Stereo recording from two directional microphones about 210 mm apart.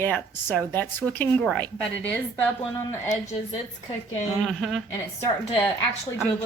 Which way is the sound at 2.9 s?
15° left (ahead or behind).